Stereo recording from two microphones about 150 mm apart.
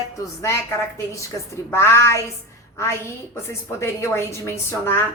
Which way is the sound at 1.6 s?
15° left (ahead or behind).